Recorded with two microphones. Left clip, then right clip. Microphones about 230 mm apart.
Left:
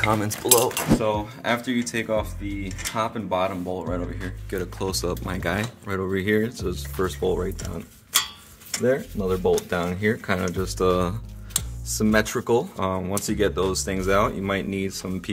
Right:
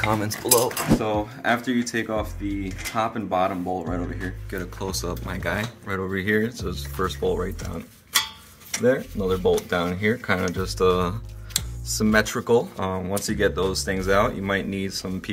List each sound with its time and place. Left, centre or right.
0.1 s speech: left
8.8 s speech: left